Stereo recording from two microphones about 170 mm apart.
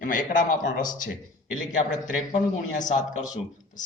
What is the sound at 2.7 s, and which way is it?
Speech, 50° left (ahead or behind).